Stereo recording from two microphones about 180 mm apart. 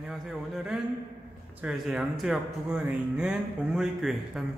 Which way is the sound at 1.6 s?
5° right (ahead or behind).